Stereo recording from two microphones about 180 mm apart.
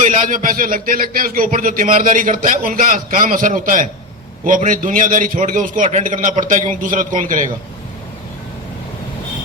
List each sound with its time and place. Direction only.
0.0 s a man's voice: 45° right (ahead or behind)